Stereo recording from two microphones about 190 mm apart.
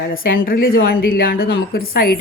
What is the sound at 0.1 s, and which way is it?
A woman's voice, 50° left (ahead or behind).